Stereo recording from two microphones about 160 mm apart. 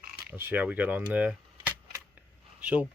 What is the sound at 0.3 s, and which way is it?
Speech, 10° right (ahead or behind).